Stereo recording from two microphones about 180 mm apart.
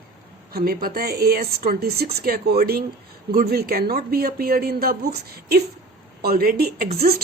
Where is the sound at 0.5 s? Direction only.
55° right (ahead or behind).